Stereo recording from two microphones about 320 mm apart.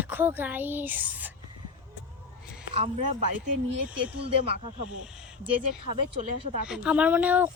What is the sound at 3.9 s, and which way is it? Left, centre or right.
Speech, right.